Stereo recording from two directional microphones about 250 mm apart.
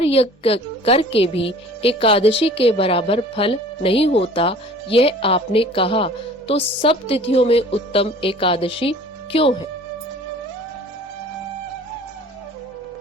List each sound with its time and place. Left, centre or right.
0.0 s a woman's voice: left